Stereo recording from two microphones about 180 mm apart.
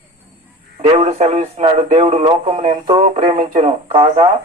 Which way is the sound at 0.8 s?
30° right (ahead or behind).